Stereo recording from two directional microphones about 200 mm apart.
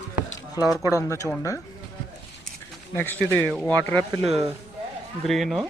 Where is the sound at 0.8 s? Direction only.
15° left (ahead or behind).